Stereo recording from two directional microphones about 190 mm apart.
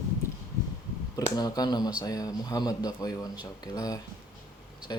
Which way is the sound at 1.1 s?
20° left (ahead or behind).